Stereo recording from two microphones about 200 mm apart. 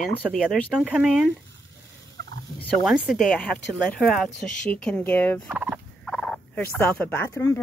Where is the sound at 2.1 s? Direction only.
65° right (ahead or behind).